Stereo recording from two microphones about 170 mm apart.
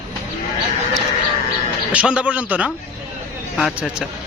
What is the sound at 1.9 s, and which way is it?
A man's voice, 5° right (ahead or behind).